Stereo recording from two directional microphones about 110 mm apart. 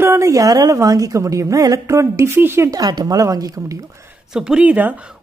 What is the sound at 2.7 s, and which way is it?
Speech, 35° right (ahead or behind).